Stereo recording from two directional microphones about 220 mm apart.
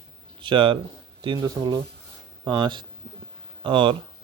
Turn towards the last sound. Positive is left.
turn(degrees=-20)  # may be behind; listen again after turning